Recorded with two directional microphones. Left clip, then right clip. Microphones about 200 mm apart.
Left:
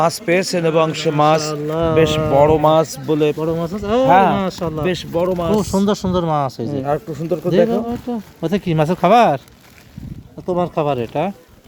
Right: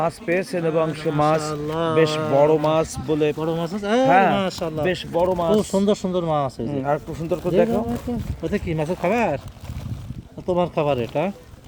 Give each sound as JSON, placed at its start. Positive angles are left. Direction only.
{"t": 0.0, "sound": "a man's voice", "side_deg": 5}
{"t": 1.6, "sound": "speech", "side_deg": 15}
{"t": 2.4, "sound": "a man's voice", "side_deg": 5}
{"t": 2.6, "sound": "speech", "side_deg": 15}
{"t": 3.3, "sound": "speech", "side_deg": 0}
{"t": 5.5, "sound": "speech", "side_deg": 25}
{"t": 6.7, "sound": "speech", "side_deg": 10}
{"t": 8.4, "sound": "speech", "side_deg": 45}
{"t": 10.4, "sound": "speech", "side_deg": 30}